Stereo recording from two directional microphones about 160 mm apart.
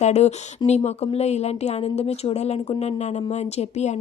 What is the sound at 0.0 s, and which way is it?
A woman's voice, 45° left (ahead or behind).